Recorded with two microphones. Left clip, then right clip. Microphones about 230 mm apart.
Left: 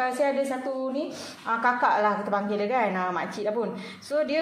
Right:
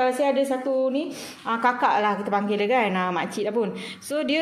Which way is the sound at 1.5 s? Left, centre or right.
Right.